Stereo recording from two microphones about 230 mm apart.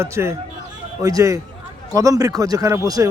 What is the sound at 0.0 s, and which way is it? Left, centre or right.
Speech, centre.